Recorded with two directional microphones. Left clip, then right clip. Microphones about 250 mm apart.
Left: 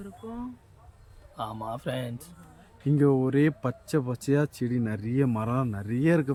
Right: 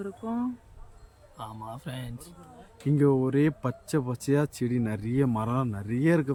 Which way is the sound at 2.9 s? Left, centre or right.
Centre.